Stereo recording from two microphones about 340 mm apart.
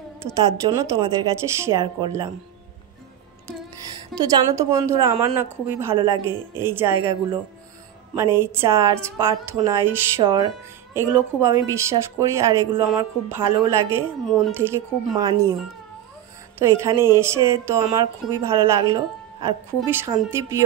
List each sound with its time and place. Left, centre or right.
0.2 s a woman's voice: right
0.7 s speech: centre
4.1 s speech: centre
16.6 s speech: centre